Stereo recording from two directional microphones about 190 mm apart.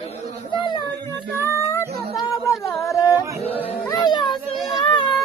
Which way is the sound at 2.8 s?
15° left (ahead or behind).